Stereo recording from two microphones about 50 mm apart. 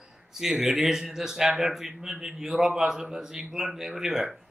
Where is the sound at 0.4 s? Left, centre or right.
Centre.